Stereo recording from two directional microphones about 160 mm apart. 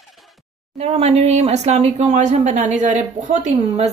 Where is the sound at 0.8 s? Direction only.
45° right (ahead or behind).